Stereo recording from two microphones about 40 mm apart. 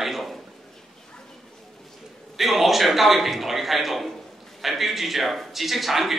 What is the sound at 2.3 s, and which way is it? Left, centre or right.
A man's voice, centre.